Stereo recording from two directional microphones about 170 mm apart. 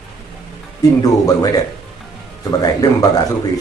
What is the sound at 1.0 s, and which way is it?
A man's voice, 20° left (ahead or behind).